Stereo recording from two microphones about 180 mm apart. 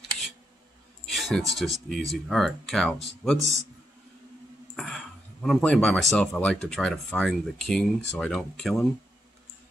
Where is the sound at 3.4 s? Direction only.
15° right (ahead or behind).